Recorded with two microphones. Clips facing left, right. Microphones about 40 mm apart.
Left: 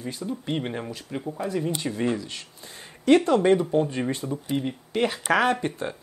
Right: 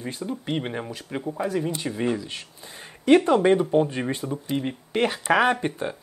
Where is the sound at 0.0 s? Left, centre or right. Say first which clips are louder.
Right 1 dB; right.